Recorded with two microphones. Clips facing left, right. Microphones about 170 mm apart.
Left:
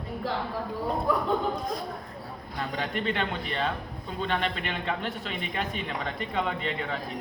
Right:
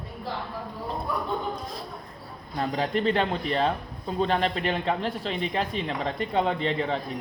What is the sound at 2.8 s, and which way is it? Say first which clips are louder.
A man's voice: right 5 dB; 35° right (ahead or behind).